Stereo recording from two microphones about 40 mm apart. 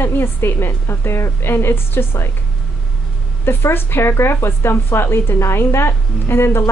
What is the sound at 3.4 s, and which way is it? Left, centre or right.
A woman's voice, left.